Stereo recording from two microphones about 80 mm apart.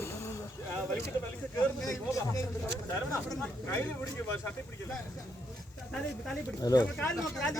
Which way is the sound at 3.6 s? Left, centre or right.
Left.